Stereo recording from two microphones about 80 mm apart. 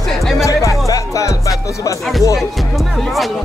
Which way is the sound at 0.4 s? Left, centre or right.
Left.